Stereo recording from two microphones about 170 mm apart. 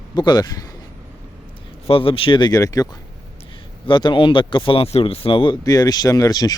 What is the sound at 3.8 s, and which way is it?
Speech, 30° left (ahead or behind).